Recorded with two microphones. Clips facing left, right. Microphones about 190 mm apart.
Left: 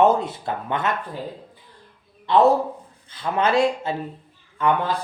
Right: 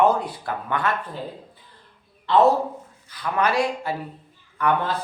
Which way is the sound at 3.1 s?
25° left (ahead or behind).